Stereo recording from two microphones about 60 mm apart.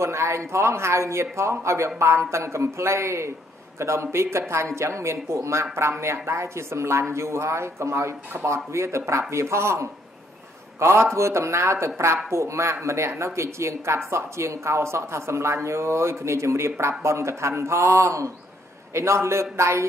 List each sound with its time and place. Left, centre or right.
0.0 s speech: right